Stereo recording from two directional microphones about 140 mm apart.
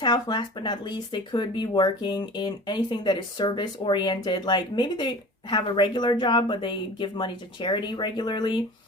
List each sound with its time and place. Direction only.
0.0 s speech: 30° left (ahead or behind)